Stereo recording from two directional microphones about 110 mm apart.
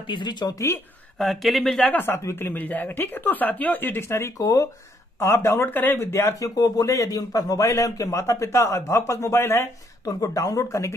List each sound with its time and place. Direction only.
0.0 s speech: 45° left (ahead or behind)
1.1 s speech: centre (ahead or behind)
2.0 s a woman's voice: 25° left (ahead or behind)